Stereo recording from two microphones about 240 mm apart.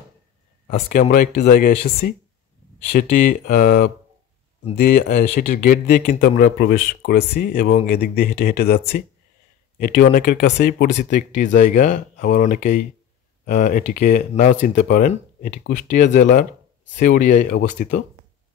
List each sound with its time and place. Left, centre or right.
0.7 s speech: left